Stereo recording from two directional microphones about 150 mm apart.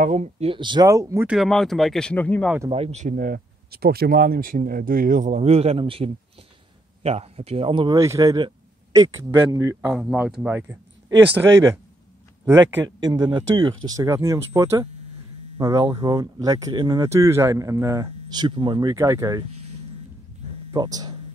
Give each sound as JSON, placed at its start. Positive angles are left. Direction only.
{"t": 0.0, "sound": "speech", "side_deg": -55}
{"t": 0.5, "sound": "speech", "side_deg": -30}
{"t": 0.8, "sound": "speech", "side_deg": -20}
{"t": 1.2, "sound": "speech", "side_deg": -5}
{"t": 2.7, "sound": "speech", "side_deg": -45}
{"t": 8.0, "sound": "speech", "side_deg": -20}
{"t": 9.8, "sound": "speech", "side_deg": -5}
{"t": 12.8, "sound": "speech", "side_deg": -30}
{"t": 20.7, "sound": "speech", "side_deg": -25}